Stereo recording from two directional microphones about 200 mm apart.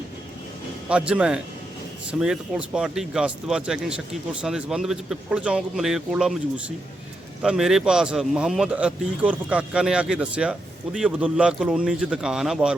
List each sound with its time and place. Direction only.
0.9 s speech: 5° right (ahead or behind)
7.4 s speech: centre (ahead or behind)